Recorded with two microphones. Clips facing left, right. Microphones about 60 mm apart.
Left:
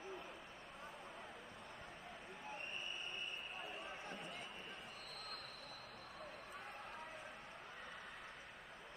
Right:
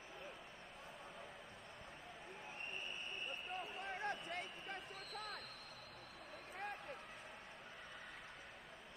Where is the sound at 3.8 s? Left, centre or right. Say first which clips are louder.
Right 5 dB; right.